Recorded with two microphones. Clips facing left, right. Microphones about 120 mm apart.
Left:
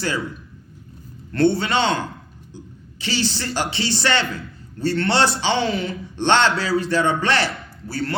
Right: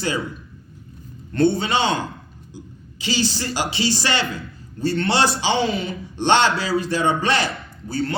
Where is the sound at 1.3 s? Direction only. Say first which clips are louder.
Even; 20° right (ahead or behind).